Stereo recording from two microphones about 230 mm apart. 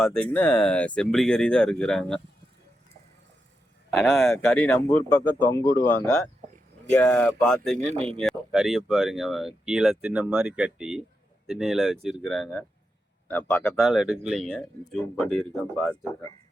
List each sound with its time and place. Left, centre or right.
0.0 s speech: centre
3.9 s speech: centre
7.8 s speech: right
8.2 s speech: centre